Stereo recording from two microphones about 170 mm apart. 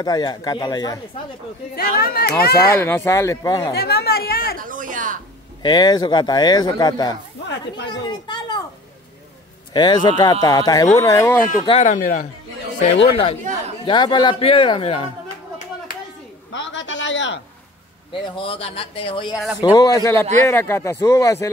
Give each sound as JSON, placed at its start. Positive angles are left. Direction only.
{"t": 0.0, "sound": "speech", "side_deg": 25}
{"t": 1.8, "sound": "a woman's voice", "side_deg": 65}
{"t": 2.7, "sound": "speech", "side_deg": 15}
{"t": 3.7, "sound": "a woman's voice", "side_deg": 70}
{"t": 4.6, "sound": "speech", "side_deg": -50}
{"t": 5.6, "sound": "speech", "side_deg": 25}
{"t": 7.4, "sound": "speech", "side_deg": 90}
{"t": 7.9, "sound": "a child's voice", "side_deg": 25}
{"t": 9.8, "sound": "speech", "side_deg": 25}
{"t": 11.6, "sound": "speech", "side_deg": 35}
{"t": 11.9, "sound": "speech", "side_deg": 45}
{"t": 12.8, "sound": "speech", "side_deg": 35}
{"t": 16.5, "sound": "a sound", "side_deg": 90}
{"t": 18.2, "sound": "speech", "side_deg": 30}